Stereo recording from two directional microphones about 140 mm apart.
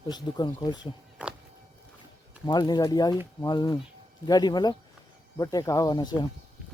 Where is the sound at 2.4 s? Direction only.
30° left (ahead or behind).